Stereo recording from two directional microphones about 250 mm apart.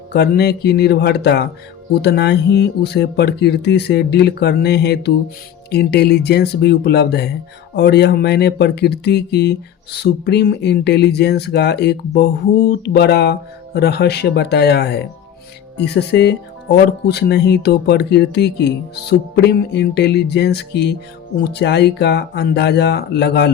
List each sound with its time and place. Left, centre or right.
0.1 s speech: left